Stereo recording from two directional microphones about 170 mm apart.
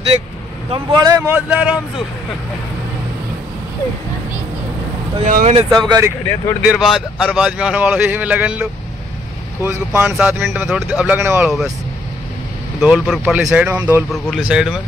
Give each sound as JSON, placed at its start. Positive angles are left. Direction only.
{"t": 0.7, "sound": "speech", "side_deg": -20}
{"t": 5.2, "sound": "speech", "side_deg": -50}
{"t": 5.7, "sound": "speech", "side_deg": -25}
{"t": 6.6, "sound": "speech", "side_deg": -5}
{"t": 11.1, "sound": "speech", "side_deg": -10}
{"t": 12.8, "sound": "speech", "side_deg": -5}